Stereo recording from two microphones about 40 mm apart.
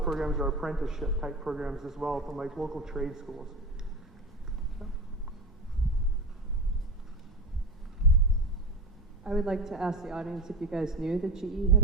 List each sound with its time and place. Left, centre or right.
0.0 s a man's voice: centre
9.2 s a man's voice: centre